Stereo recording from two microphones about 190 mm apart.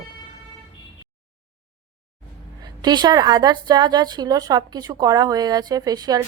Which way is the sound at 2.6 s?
20° right (ahead or behind).